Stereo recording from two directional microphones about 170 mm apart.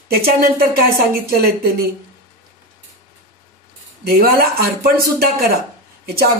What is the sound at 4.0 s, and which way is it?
Speech, 60° right (ahead or behind).